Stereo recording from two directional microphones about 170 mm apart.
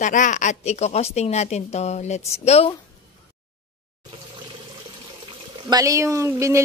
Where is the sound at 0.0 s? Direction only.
45° left (ahead or behind).